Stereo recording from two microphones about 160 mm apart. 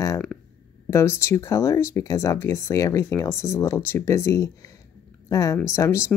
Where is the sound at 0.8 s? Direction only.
15° left (ahead or behind).